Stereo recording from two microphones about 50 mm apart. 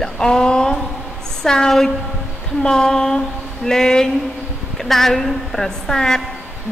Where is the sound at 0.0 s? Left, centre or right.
Centre.